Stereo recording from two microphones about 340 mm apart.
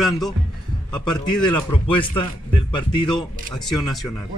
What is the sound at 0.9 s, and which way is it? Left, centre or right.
Speech, centre.